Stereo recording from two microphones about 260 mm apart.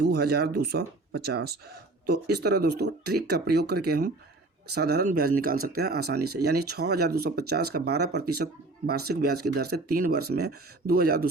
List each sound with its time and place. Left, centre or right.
0.0 s speech: right